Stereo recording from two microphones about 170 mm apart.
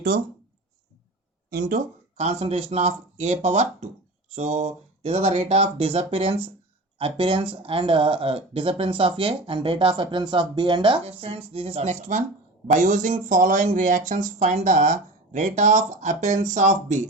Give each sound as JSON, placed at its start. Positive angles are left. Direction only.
{"t": 1.5, "sound": "speech", "side_deg": -55}